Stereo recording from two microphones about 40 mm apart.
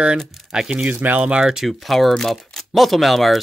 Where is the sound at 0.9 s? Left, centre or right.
Right.